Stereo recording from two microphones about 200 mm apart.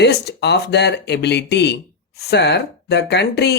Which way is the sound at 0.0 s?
55° left (ahead or behind).